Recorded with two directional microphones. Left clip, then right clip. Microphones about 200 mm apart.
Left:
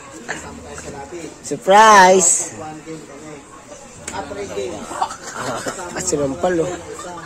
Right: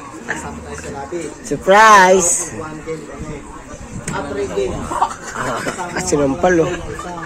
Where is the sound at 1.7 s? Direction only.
10° left (ahead or behind).